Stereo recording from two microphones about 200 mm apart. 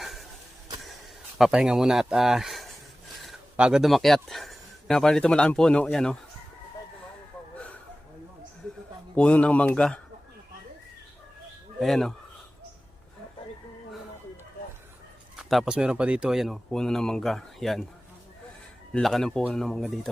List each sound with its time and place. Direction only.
0.0 s a sound: centre (ahead or behind)
1.4 s speech: 5° right (ahead or behind)
7.5 s a sound: 5° left (ahead or behind)
9.1 s speech: 5° left (ahead or behind)
11.8 s speech: centre (ahead or behind)
15.4 s speech: centre (ahead or behind)
18.9 s speech: centre (ahead or behind)